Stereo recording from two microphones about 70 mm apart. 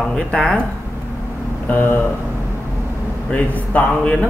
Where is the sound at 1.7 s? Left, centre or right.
Left.